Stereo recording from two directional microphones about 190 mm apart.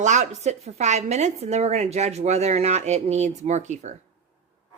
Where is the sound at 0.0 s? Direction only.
40° right (ahead or behind).